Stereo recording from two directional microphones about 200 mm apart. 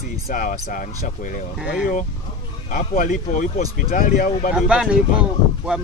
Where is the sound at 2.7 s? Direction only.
40° left (ahead or behind).